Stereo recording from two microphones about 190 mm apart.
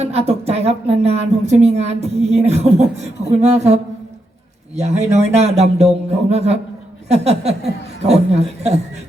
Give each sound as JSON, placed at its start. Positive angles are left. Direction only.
{"t": 0.0, "sound": "a woman's voice", "side_deg": -35}
{"t": 4.8, "sound": "a woman's voice", "side_deg": -35}